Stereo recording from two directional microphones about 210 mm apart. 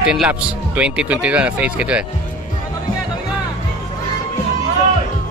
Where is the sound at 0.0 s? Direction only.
5° right (ahead or behind).